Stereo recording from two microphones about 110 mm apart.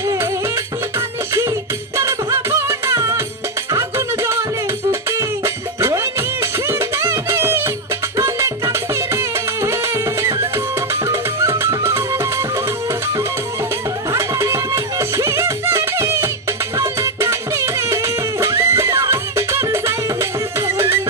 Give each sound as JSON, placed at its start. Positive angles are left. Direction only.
{"t": 0.0, "sound": "music", "side_deg": -30}
{"t": 14.1, "sound": "music", "side_deg": -25}